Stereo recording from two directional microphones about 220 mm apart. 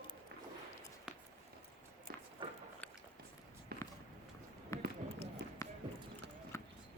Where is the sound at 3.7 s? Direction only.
45° right (ahead or behind).